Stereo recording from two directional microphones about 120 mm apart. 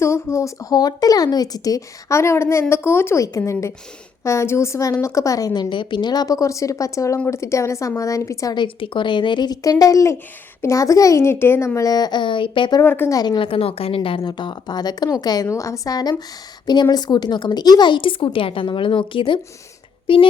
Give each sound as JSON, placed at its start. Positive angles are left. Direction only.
{"t": 0.0, "sound": "a woman's voice", "side_deg": 25}
{"t": 5.6, "sound": "a woman's voice", "side_deg": 45}
{"t": 8.5, "sound": "a woman's voice", "side_deg": 45}
{"t": 12.8, "sound": "a woman's voice", "side_deg": 20}
{"t": 13.1, "sound": "a woman's voice", "side_deg": 35}